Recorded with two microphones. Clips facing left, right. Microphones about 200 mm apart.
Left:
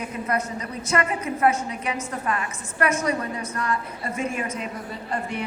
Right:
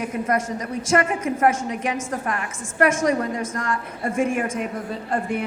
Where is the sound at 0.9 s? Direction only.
50° right (ahead or behind).